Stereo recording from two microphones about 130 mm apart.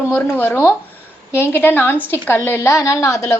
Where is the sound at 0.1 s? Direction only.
15° left (ahead or behind).